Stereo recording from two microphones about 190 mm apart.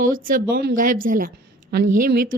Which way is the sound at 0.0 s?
45° right (ahead or behind).